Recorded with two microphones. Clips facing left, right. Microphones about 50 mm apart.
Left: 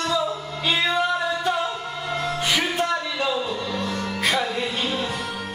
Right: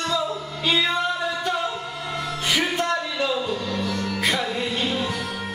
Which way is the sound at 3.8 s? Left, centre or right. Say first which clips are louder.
Right 1 dB; left.